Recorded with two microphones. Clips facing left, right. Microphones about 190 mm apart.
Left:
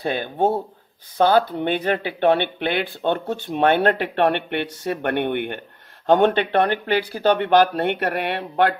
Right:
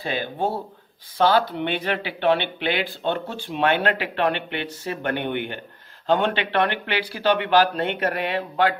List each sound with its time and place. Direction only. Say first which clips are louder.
0.0 s speech: left 4 dB; 50° left (ahead or behind)